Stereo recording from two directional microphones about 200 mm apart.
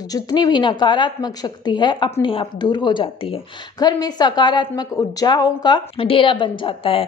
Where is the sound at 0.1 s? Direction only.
20° left (ahead or behind).